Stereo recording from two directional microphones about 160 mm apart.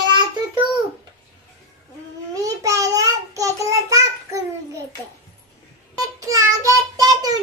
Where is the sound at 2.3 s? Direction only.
20° right (ahead or behind).